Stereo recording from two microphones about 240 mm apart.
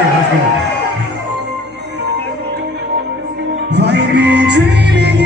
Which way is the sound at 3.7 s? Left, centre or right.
Right.